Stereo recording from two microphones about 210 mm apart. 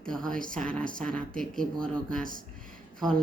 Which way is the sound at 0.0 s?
5° left (ahead or behind).